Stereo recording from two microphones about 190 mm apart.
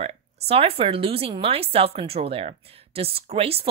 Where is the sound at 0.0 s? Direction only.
30° right (ahead or behind).